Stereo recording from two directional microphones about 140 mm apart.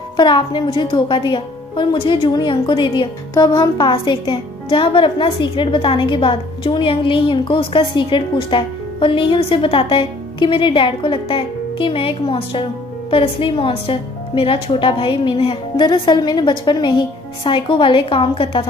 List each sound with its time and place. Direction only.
0.2 s a woman's voice: 35° left (ahead or behind)